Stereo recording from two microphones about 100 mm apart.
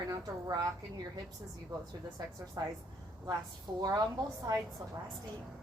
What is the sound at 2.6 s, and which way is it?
Speech, 40° right (ahead or behind).